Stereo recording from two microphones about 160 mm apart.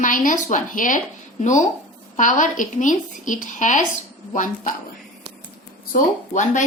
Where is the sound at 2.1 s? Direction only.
50° left (ahead or behind).